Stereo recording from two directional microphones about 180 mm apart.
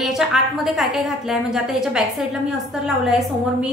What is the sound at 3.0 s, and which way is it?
Speech, centre (ahead or behind).